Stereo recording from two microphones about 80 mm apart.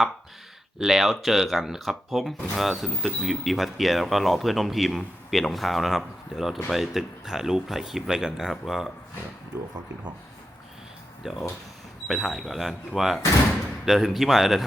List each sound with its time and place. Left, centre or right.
0.8 s speech: centre
11.2 s speech: centre